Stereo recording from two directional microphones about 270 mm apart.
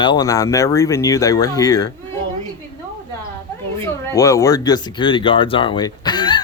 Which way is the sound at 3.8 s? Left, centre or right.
Centre.